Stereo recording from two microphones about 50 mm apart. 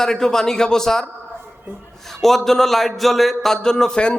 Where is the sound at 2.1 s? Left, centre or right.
Centre.